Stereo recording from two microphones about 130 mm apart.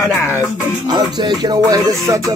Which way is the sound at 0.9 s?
35° right (ahead or behind).